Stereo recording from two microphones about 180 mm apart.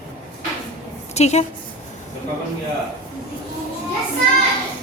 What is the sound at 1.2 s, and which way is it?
Speech, 40° left (ahead or behind).